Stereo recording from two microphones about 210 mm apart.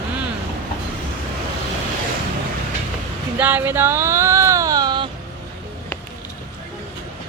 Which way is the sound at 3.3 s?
10° right (ahead or behind).